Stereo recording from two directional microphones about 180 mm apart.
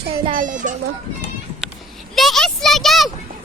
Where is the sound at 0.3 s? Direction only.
45° right (ahead or behind).